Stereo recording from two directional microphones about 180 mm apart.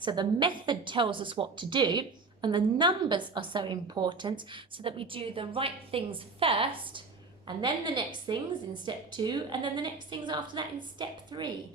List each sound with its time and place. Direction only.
0.0 s a woman's voice: 25° right (ahead or behind)